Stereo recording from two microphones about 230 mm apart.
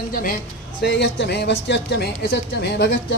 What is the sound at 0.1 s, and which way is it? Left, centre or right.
A man's voice, left.